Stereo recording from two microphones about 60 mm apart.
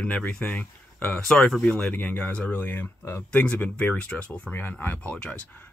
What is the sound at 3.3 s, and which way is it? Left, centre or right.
Speech, centre.